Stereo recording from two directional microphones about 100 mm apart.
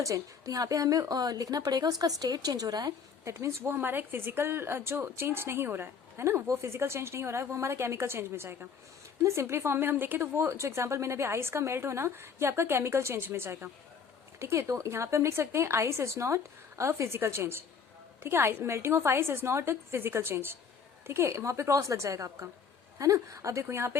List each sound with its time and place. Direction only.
0.0 s a woman's voice: 35° right (ahead or behind)